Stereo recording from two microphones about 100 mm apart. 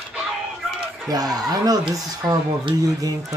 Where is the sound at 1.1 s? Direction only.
40° right (ahead or behind).